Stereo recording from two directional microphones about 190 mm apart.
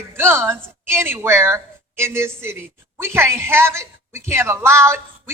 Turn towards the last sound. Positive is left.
turn(degrees=-15)  # may be behind; listen again after turning